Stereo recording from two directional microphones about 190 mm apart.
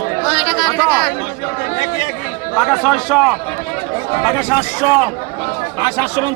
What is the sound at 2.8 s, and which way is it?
Speech, centre (ahead or behind).